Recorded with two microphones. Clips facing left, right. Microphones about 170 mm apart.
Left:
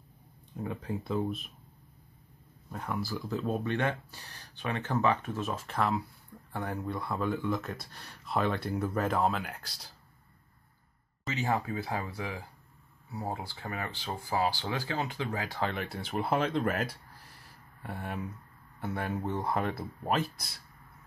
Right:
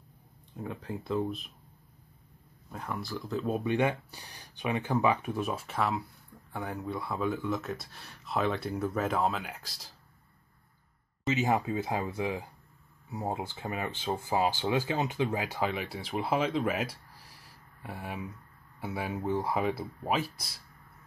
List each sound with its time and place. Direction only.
0.6 s speech: centre (ahead or behind)
2.7 s speech: centre (ahead or behind)
11.2 s speech: 20° right (ahead or behind)
15.7 s speech: centre (ahead or behind)